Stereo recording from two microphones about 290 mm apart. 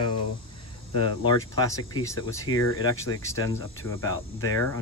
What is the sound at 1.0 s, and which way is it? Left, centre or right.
Speech, centre.